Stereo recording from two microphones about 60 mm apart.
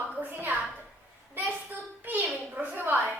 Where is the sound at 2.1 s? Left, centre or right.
Right.